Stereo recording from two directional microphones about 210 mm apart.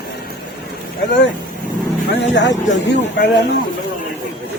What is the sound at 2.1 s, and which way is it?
Speech, 55° left (ahead or behind).